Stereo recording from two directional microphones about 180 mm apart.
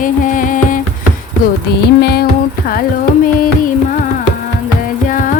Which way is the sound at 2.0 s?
60° left (ahead or behind).